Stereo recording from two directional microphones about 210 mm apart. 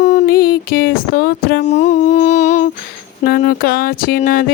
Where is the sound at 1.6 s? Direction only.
35° left (ahead or behind).